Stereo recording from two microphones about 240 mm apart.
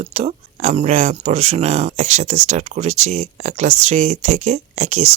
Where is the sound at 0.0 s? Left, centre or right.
Right.